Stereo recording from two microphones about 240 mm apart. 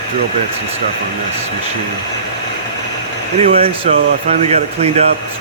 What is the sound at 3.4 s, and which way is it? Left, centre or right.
Speech, right.